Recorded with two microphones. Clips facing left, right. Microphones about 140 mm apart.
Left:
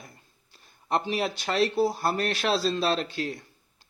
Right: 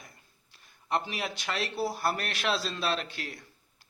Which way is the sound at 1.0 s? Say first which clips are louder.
Left 7 dB; 30° left (ahead or behind).